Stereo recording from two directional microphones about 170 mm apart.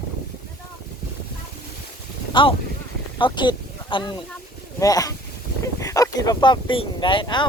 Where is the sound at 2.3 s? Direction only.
30° left (ahead or behind).